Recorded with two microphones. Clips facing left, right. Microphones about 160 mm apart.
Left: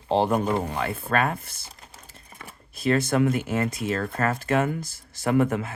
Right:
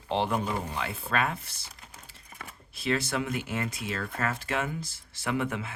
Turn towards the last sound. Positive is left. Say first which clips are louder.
# left 8 dB
turn(degrees=45)  # may be behind; listen again after turning